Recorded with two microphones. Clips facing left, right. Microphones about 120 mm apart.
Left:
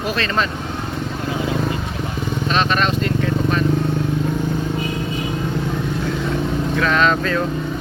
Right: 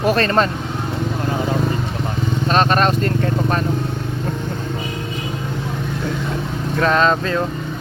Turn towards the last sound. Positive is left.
turn(degrees=-25)  # may be behind; listen again after turning